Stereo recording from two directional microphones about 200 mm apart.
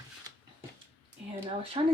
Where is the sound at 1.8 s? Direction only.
25° right (ahead or behind).